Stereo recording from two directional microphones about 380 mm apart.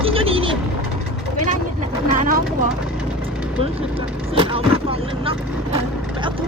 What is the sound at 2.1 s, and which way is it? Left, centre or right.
Vehicle, right.